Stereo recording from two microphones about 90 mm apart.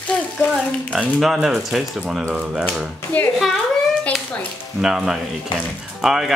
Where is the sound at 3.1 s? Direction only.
15° left (ahead or behind).